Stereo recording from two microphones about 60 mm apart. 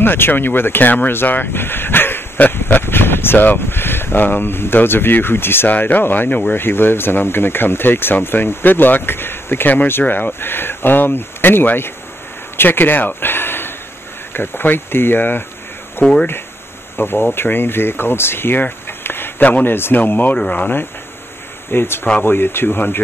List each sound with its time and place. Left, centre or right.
0.0 s speech: left
12.5 s a sound: left
14.3 s speech: left
21.6 s speech: left